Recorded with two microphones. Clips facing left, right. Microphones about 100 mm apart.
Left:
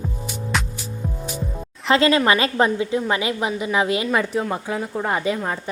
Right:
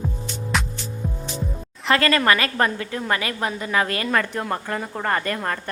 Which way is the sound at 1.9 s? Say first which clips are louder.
Left 2 dB; 20° left (ahead or behind).